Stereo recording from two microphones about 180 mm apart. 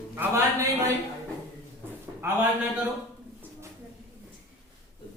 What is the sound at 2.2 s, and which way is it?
Speech, 15° right (ahead or behind).